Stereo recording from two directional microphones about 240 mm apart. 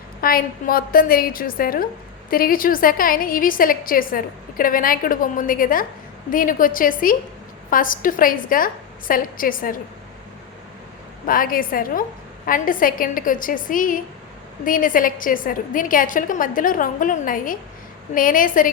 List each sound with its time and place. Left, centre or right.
0.2 s a woman's voice: left
11.3 s a woman's voice: left